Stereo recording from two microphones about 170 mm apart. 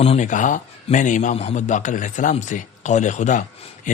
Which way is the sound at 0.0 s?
40° left (ahead or behind).